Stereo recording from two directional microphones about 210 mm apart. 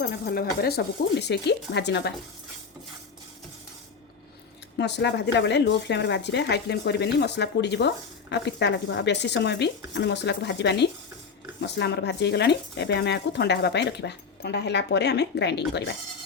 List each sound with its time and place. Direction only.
0.3 s speech: 50° left (ahead or behind)
4.8 s speech: 55° left (ahead or behind)